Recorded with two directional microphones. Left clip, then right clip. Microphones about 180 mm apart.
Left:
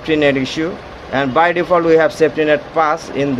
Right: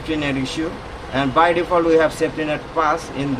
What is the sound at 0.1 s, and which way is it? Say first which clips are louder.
Speech: left 9 dB; 45° left (ahead or behind).